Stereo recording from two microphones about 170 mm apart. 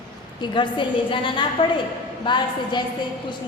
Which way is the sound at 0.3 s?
25° left (ahead or behind).